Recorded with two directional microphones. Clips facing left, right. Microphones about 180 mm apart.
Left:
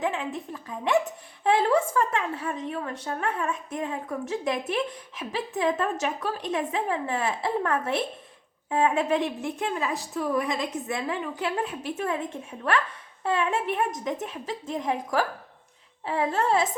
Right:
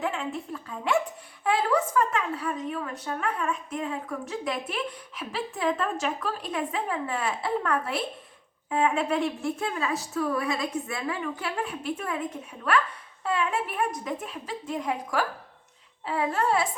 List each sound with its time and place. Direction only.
0.0 s a woman's voice: 20° left (ahead or behind)
1.5 s a woman's voice: 25° left (ahead or behind)